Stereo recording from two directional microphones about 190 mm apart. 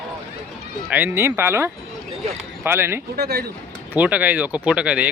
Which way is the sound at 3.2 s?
55° right (ahead or behind).